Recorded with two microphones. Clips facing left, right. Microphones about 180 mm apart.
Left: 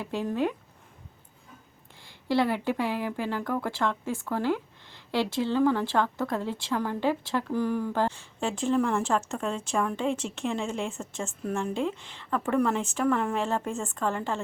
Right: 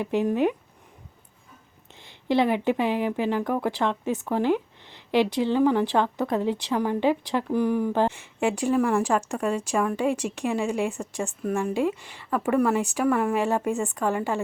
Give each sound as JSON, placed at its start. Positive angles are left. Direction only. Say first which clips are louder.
{"t": 0.0, "sound": "speech", "louder": "right 5 dB", "side_deg": -15}
{"t": 2.0, "sound": "speech", "louder": "right 3 dB", "side_deg": -20}